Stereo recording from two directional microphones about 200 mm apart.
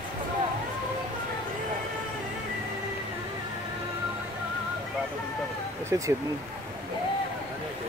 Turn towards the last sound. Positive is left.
turn(degrees=-15)  # may be behind; listen again after turning